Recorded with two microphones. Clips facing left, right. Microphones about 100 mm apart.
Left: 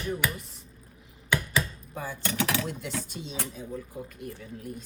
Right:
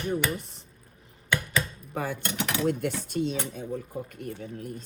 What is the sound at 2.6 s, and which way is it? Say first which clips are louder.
Speech: right 7 dB; 55° right (ahead or behind).